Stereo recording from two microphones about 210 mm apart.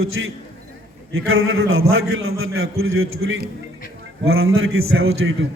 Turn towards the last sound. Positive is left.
turn(degrees=-75)  # may be behind; listen again after turning